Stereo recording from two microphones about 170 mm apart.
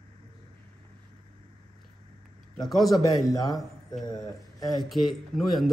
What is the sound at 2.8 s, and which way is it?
A man's voice, 25° left (ahead or behind).